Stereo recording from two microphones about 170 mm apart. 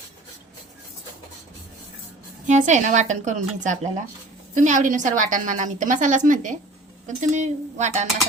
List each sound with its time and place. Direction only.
2.5 s a woman's voice: 45° right (ahead or behind)